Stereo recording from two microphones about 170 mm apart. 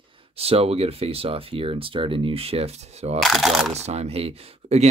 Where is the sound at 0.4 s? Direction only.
35° right (ahead or behind).